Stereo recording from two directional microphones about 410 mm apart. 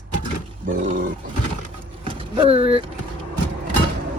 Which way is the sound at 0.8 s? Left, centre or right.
Centre.